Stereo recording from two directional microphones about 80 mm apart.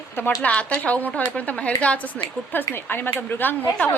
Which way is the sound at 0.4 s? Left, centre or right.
Centre.